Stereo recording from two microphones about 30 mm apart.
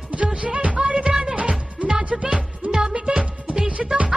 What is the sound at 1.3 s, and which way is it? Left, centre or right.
Music, right.